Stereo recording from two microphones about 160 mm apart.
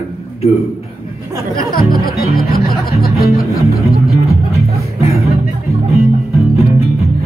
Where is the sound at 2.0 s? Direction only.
70° left (ahead or behind).